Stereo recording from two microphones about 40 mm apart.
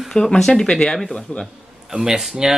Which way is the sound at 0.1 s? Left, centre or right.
Centre.